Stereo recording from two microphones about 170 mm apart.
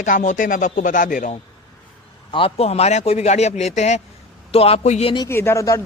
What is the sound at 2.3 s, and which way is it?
A man's voice, 35° left (ahead or behind).